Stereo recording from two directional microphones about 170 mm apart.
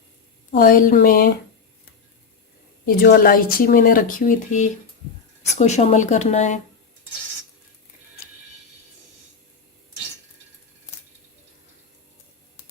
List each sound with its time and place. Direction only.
0.5 s speech: 55° left (ahead or behind)
2.8 s speech: 65° left (ahead or behind); by 6.6 s 45° left (ahead or behind)